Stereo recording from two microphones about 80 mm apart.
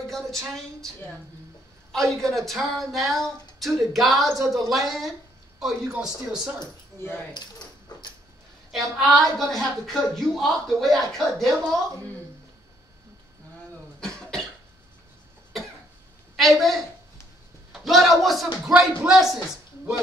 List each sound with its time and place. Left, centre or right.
0.0 s a sound: centre
0.5 s a man's voice: centre
7.3 s dog: left
9.2 s speech: centre
13.9 s cough: centre
16.3 s a woman's voice: centre